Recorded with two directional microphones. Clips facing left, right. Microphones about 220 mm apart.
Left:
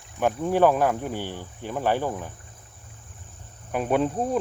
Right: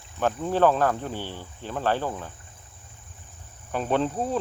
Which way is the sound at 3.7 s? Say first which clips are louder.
Left 2 dB; 10° left (ahead or behind).